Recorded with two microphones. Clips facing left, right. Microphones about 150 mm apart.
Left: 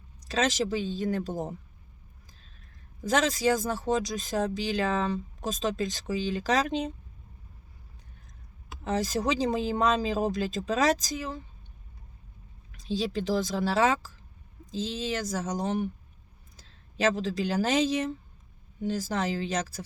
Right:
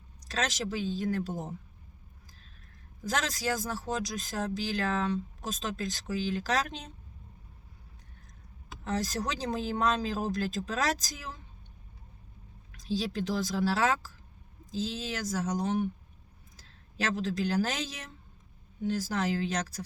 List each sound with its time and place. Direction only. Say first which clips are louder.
0.3 s speech: left 6 dB; centre (ahead or behind)
3.0 s speech: left 7 dB; centre (ahead or behind)
8.8 s speech: left 4 dB; centre (ahead or behind)
12.8 s speech: left 2 dB; centre (ahead or behind)